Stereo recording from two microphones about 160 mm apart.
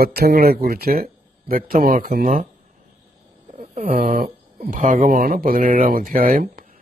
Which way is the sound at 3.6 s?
55° right (ahead or behind).